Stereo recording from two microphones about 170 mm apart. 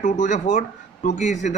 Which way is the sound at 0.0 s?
45° left (ahead or behind).